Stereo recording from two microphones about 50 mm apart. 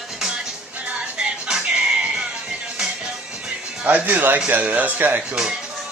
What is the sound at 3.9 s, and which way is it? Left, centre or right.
Speech, right.